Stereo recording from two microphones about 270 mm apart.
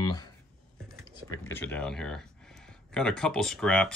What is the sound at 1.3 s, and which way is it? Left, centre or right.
Speech, centre.